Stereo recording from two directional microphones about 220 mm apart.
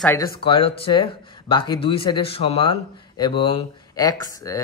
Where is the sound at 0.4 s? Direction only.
25° left (ahead or behind).